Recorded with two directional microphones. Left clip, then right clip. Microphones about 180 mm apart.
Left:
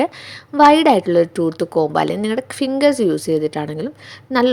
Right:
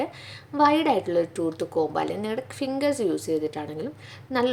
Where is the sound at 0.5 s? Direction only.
40° left (ahead or behind).